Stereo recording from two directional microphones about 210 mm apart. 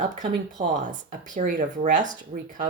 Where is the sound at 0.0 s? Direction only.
35° right (ahead or behind).